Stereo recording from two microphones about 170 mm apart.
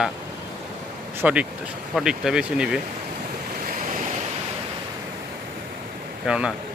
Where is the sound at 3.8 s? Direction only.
50° right (ahead or behind).